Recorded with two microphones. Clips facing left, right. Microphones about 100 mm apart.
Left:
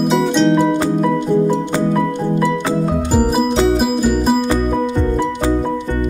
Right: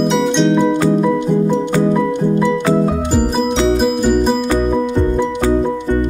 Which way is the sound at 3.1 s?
5° left (ahead or behind).